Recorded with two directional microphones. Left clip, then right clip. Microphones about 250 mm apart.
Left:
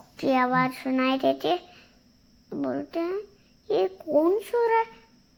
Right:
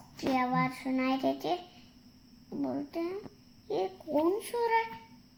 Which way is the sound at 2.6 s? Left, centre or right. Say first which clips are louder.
Left 6 dB; left.